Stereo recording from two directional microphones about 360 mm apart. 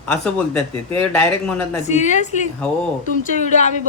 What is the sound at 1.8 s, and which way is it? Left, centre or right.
A woman's voice, centre.